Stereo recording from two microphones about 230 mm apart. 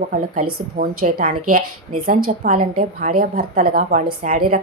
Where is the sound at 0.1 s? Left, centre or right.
Right.